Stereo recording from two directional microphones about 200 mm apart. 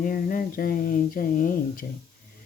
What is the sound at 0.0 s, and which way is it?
Speech, 45° left (ahead or behind).